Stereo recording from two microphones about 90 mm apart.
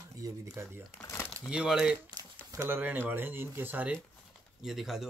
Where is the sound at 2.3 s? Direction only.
35° right (ahead or behind).